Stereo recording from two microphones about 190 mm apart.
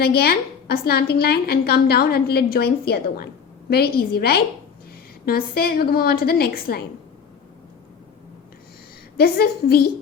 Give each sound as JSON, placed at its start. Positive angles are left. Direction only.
{"t": 0.0, "sound": "a woman's voice", "side_deg": 55}
{"t": 9.1, "sound": "a woman's voice", "side_deg": 55}